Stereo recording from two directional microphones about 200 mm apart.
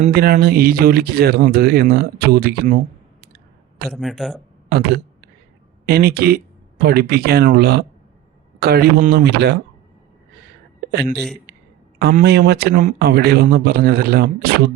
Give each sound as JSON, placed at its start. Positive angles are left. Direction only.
{"t": 0.0, "sound": "speech", "side_deg": -50}
{"t": 3.8, "sound": "a man's voice", "side_deg": 0}
{"t": 4.7, "sound": "speech", "side_deg": -50}
{"t": 11.9, "sound": "speech", "side_deg": -55}